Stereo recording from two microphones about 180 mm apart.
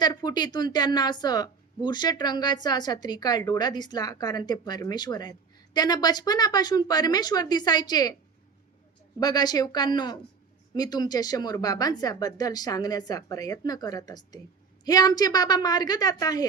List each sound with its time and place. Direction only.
0.0 s a woman's voice: 25° left (ahead or behind)
9.2 s a woman's voice: 20° left (ahead or behind)